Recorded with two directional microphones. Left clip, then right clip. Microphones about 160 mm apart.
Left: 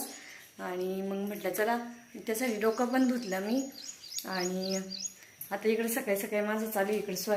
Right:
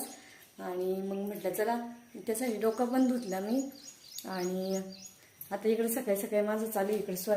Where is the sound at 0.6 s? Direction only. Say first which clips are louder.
Right 1 dB; 10° right (ahead or behind).